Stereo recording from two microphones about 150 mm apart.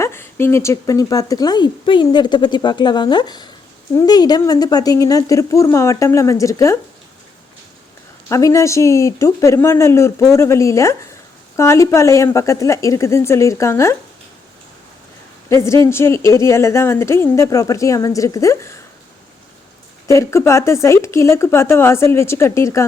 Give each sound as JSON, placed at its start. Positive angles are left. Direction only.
{"t": 0.0, "sound": "speech", "side_deg": 15}
{"t": 8.3, "sound": "speech", "side_deg": 20}
{"t": 15.4, "sound": "speech", "side_deg": 20}
{"t": 20.1, "sound": "speech", "side_deg": 20}